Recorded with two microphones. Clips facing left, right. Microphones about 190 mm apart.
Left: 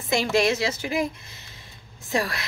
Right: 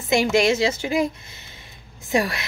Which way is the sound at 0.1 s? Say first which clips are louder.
Right 3 dB; 15° right (ahead or behind).